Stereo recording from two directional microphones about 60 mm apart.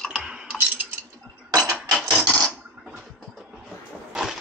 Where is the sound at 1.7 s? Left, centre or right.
Centre.